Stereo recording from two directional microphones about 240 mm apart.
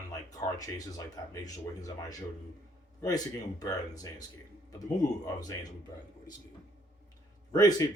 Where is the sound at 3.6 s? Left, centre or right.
Centre.